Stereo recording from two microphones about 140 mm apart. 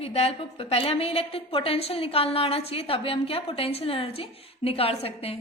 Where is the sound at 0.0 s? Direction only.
45° left (ahead or behind).